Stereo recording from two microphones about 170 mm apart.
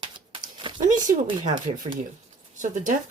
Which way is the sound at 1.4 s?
50° right (ahead or behind).